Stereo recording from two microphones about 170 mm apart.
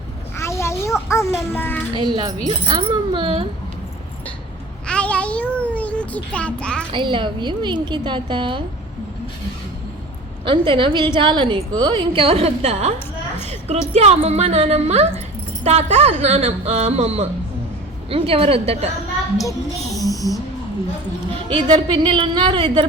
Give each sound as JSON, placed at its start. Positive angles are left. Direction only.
{"t": 0.3, "sound": "a sound", "side_deg": 15}
{"t": 1.3, "sound": "babbling", "side_deg": 10}
{"t": 2.0, "sound": "a woman's voice", "side_deg": -25}
{"t": 4.9, "sound": "child singing", "side_deg": 5}
{"t": 6.3, "sound": "a child's voice", "side_deg": 5}
{"t": 6.9, "sound": "a woman's voice", "side_deg": -30}
{"t": 10.4, "sound": "a woman's voice", "side_deg": -30}
{"t": 20.0, "sound": "music", "side_deg": 20}
{"t": 21.5, "sound": "a woman's voice", "side_deg": -25}